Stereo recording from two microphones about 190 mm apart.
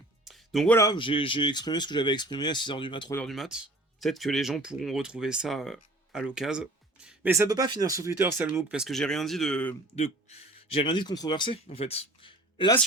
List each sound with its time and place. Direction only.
0.3 s music: centre (ahead or behind)
0.8 s speech: 25° left (ahead or behind)
3.2 s speech: centre (ahead or behind)
9.9 s speech: 35° left (ahead or behind)